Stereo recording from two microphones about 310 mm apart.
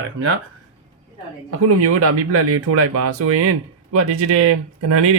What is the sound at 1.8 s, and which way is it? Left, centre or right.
Speech, right.